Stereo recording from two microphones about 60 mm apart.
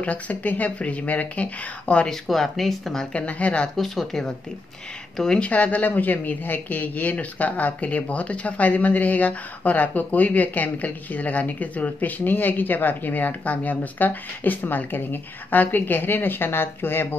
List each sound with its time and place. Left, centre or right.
0.0 s speech: left
2.0 s speech: centre
3.2 s speech: left
3.7 s speech: centre
5.4 s a woman's voice: left